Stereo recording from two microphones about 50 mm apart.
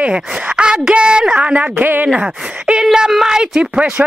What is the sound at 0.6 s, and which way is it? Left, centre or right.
Speech, centre.